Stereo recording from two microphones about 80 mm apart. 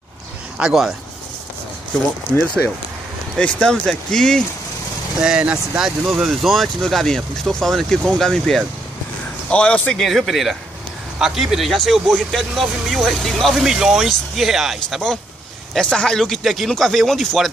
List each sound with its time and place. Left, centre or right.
0.6 s speech: centre
3.3 s speech: centre
5.2 s speech: centre
6.2 s speech: centre
9.5 s speech: centre
9.9 s speech: centre
15.7 s speech: centre